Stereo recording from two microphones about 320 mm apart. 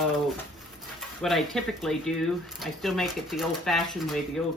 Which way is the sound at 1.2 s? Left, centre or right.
Centre.